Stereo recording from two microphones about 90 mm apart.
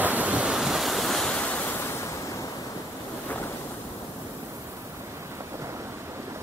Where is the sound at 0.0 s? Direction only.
15° right (ahead or behind).